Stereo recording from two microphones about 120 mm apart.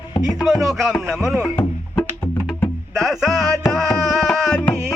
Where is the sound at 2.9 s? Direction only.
Centre (ahead or behind).